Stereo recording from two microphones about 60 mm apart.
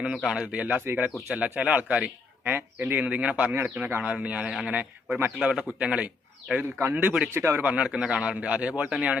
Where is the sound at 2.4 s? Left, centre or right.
Right.